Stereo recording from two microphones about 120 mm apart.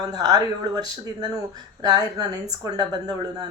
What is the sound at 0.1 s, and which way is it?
Speech, 30° right (ahead or behind).